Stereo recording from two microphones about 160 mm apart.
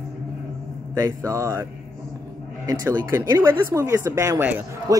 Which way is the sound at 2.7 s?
20° right (ahead or behind).